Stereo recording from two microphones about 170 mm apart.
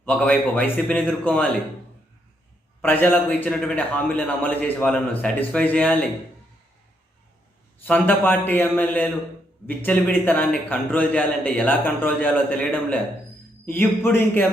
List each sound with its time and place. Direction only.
0.0 s a man's voice: 10° left (ahead or behind)
2.8 s a man's voice: 10° left (ahead or behind)
7.9 s a man's voice: 10° left (ahead or behind)